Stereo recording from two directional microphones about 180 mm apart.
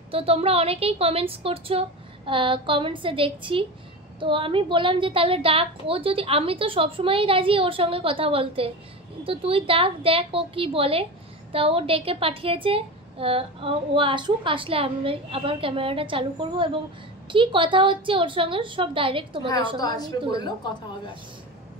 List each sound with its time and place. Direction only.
0.1 s a woman's voice: 30° right (ahead or behind)
19.8 s a woman's voice: 20° left (ahead or behind)